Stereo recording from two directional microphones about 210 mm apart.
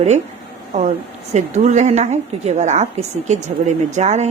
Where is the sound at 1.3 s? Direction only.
35° right (ahead or behind).